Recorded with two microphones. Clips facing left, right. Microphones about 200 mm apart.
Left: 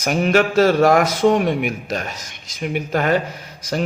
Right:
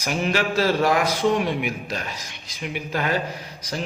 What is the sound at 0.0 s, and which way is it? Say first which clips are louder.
A man's voice: left 7 dB; 50° left (ahead or behind).